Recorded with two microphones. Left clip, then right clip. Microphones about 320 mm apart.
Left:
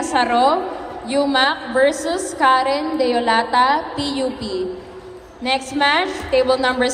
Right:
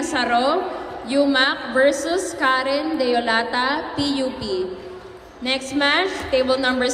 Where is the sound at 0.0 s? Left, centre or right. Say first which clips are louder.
Left 4 dB; left.